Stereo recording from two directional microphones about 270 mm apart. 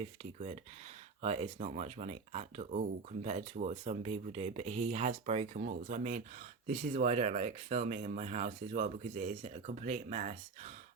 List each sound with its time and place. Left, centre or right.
0.3 s speech: right